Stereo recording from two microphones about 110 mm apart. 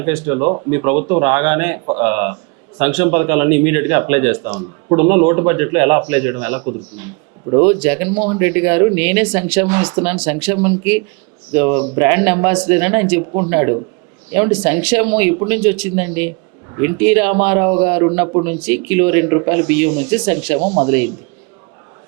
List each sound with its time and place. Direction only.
0.0 s speech: 25° right (ahead or behind)